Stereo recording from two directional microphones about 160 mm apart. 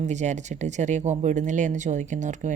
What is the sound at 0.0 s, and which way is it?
Speech, 45° right (ahead or behind).